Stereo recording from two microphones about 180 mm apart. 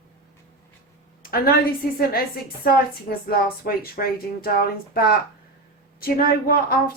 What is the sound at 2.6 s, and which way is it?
Speech, 55° left (ahead or behind).